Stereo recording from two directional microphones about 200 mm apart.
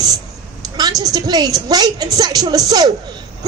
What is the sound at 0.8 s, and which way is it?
A man's voice, 20° right (ahead or behind).